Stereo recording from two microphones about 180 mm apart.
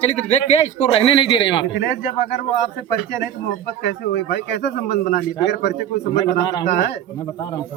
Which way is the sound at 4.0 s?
60° left (ahead or behind).